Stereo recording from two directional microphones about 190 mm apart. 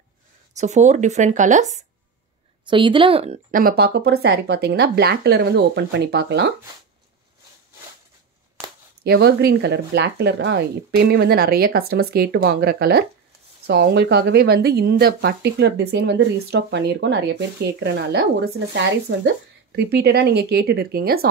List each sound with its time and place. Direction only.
0.6 s speech: 40° right (ahead or behind)
2.7 s a woman's voice: 25° right (ahead or behind)
3.5 s speech: 50° right (ahead or behind)
9.0 s speech: 55° right (ahead or behind)